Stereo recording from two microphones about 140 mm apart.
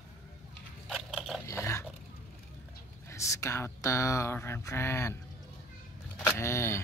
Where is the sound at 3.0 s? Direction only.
20° left (ahead or behind).